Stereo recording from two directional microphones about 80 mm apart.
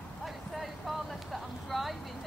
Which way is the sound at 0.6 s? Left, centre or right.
Centre.